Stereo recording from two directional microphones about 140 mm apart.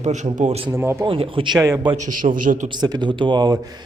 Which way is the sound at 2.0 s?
75° right (ahead or behind).